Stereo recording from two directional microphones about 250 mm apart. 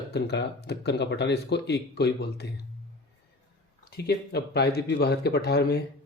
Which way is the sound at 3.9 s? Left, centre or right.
Left.